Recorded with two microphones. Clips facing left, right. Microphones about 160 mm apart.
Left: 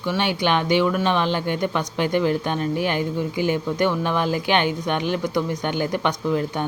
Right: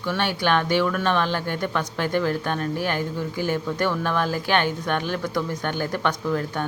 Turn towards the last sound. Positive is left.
turn(degrees=15)  # may be behind; listen again after turning